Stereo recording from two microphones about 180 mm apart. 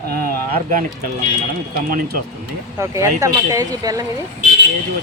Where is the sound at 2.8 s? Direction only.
15° right (ahead or behind).